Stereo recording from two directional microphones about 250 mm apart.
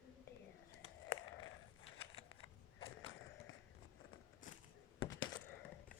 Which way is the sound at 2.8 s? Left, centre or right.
Left.